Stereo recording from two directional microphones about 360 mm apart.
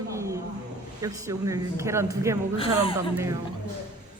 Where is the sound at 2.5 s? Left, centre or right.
Centre.